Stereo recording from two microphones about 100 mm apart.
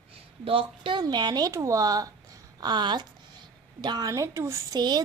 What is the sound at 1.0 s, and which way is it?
A woman's voice, 45° right (ahead or behind).